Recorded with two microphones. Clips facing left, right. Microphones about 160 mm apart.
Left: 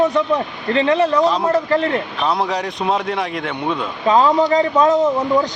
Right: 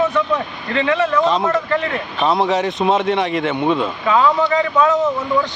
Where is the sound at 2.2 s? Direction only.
Centre (ahead or behind).